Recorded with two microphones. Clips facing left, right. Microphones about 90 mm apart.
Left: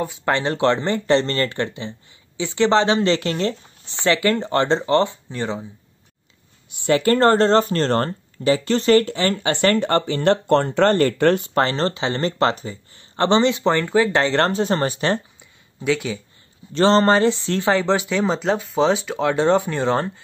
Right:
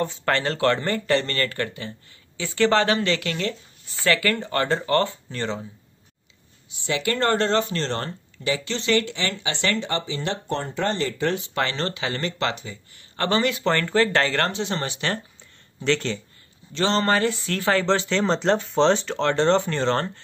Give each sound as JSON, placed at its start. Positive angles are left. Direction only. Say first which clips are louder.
{"t": 0.0, "sound": "speech", "louder": "left 2 dB", "side_deg": 15}
{"t": 6.7, "sound": "speech", "louder": "left 8 dB", "side_deg": 50}
{"t": 11.5, "sound": "speech", "louder": "left 6 dB", "side_deg": 35}
{"t": 14.3, "sound": "speech", "louder": "left 6 dB", "side_deg": 35}
{"t": 15.8, "sound": "speech", "louder": "left 2 dB", "side_deg": 10}
{"t": 16.7, "sound": "speech", "louder": "left 6 dB", "side_deg": 35}